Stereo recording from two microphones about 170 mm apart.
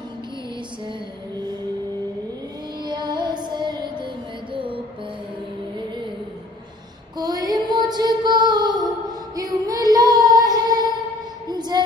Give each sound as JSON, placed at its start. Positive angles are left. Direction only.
{"t": 2.8, "sound": "music", "side_deg": -25}
{"t": 7.2, "sound": "child singing", "side_deg": -20}
{"t": 9.3, "sound": "female singing", "side_deg": -20}
{"t": 11.4, "sound": "child singing", "side_deg": -25}